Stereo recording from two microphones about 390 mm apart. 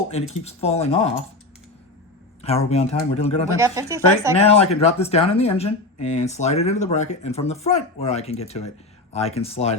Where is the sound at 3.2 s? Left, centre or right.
Centre.